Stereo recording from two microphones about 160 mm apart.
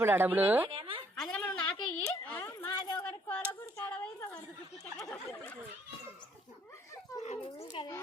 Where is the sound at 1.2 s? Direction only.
5° left (ahead or behind); by 3.0 s 25° left (ahead or behind).